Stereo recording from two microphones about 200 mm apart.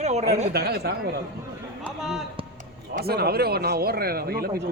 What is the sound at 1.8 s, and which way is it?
Speech, centre (ahead or behind).